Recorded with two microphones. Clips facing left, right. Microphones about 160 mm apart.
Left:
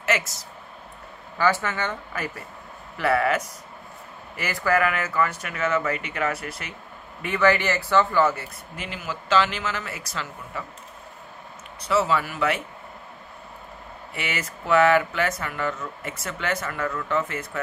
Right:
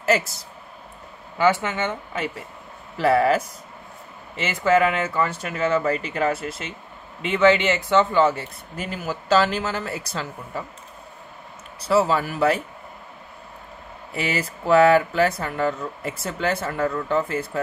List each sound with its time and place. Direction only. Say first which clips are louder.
0.0 s a sound: right 5 dB; 35° right (ahead or behind)
1.4 s speech: right 3 dB; 20° right (ahead or behind)
8.7 s speech: right 5 dB; 40° right (ahead or behind)
11.9 s speech: right 3 dB; 35° right (ahead or behind)
14.1 s speech: right 6 dB; 35° right (ahead or behind)